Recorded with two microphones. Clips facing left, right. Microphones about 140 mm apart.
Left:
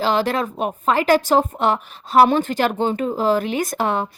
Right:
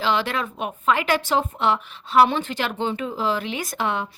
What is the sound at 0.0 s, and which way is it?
Speech, 40° left (ahead or behind).